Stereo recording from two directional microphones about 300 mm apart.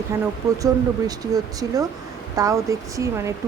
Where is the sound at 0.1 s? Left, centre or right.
Centre.